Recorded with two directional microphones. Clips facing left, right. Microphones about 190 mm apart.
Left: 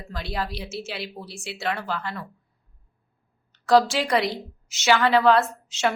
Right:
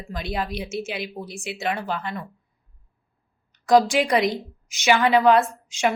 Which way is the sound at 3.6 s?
15° right (ahead or behind).